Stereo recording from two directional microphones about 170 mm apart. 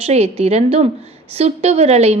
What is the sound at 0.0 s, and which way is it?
A woman's voice, 40° right (ahead or behind).